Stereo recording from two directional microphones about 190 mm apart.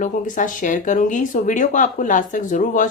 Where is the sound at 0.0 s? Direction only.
45° left (ahead or behind).